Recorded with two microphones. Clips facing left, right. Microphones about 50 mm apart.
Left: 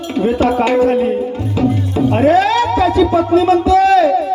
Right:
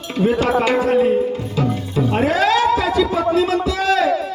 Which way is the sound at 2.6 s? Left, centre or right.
Left.